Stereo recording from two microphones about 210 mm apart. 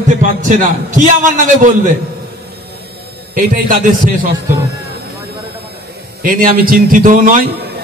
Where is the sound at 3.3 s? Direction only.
40° right (ahead or behind).